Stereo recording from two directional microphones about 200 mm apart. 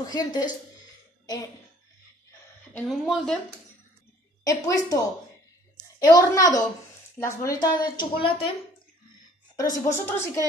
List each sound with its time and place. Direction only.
0.0 s speech: 20° left (ahead or behind)
2.7 s a woman's voice: centre (ahead or behind)
4.6 s a woman's voice: 15° left (ahead or behind)
9.6 s a woman's voice: 15° left (ahead or behind)